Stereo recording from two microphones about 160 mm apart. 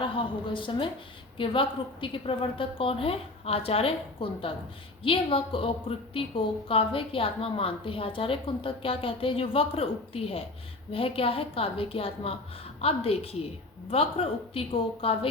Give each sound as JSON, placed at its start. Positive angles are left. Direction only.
{"t": 0.0, "sound": "a woman's voice", "side_deg": 30}